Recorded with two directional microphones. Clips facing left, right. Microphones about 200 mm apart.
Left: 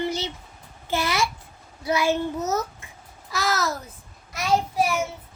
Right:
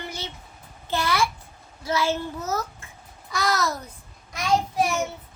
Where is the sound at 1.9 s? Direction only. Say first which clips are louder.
Left 2 dB; 15° left (ahead or behind).